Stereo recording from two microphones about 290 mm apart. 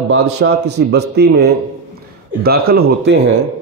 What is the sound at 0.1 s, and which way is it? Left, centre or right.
Speech, right.